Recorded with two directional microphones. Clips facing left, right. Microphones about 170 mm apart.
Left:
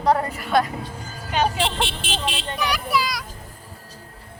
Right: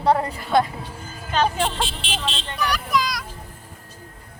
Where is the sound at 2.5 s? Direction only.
10° left (ahead or behind).